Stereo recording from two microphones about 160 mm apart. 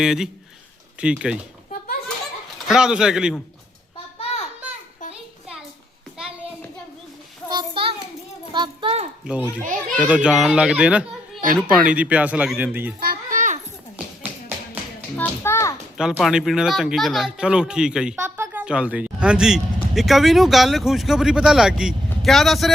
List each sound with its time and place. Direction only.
0.0 s a man's voice: 5° right (ahead or behind)
2.6 s speech: 5° right (ahead or behind)
4.2 s a sound: 40° left (ahead or behind)
5.1 s a sound: 5° right (ahead or behind)
7.5 s a sound: 35° right (ahead or behind)
8.5 s a child's voice: 30° right (ahead or behind)
9.2 s a man's voice: 5° right (ahead or behind)
9.6 s a child's voice: 55° right (ahead or behind)
10.1 s a man's voice: 5° right (ahead or behind)
13.0 s children playing: 60° right (ahead or behind)
15.1 s children playing: 15° left (ahead or behind)
16.1 s speech: centre (ahead or behind)